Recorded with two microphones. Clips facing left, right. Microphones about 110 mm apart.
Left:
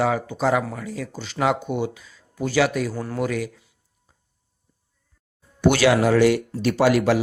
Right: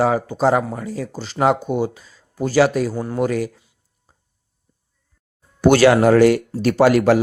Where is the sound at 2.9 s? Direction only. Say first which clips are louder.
Right 4 dB; 20° right (ahead or behind).